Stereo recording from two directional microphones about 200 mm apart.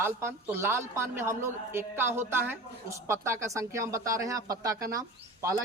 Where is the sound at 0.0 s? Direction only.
10° right (ahead or behind).